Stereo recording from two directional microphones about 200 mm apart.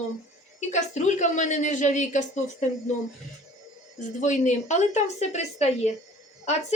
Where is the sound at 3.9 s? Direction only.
35° left (ahead or behind).